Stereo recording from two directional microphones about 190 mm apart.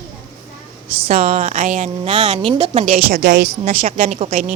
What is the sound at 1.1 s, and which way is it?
Speech, 45° right (ahead or behind).